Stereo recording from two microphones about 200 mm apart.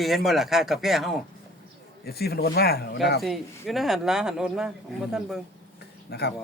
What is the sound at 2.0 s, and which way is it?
Speech, 50° left (ahead or behind).